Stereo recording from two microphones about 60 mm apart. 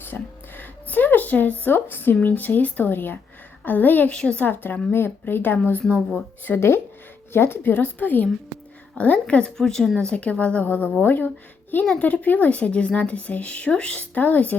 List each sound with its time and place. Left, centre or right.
0.0 s a sound: left
2.2 s speech: left
4.1 s speech: centre
4.4 s speech: left
6.6 s speech: left
7.7 s speech: left
9.6 s speech: centre; by 14.6 s left